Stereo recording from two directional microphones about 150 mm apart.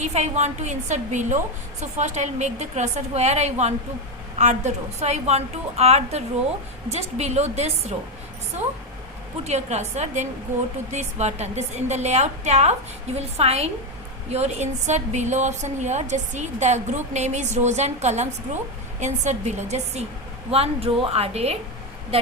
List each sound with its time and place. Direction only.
0.0 s a woman's voice: 50° right (ahead or behind)
9.4 s a woman's voice: 50° right (ahead or behind)